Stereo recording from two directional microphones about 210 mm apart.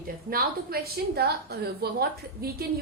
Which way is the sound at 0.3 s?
45° right (ahead or behind).